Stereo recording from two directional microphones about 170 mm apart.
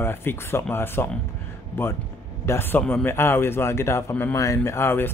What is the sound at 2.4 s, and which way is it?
Speech, 15° left (ahead or behind).